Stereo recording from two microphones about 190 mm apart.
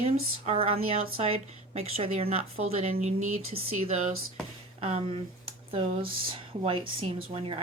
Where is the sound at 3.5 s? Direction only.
40° right (ahead or behind).